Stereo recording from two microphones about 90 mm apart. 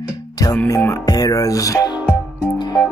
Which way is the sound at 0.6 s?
35° left (ahead or behind).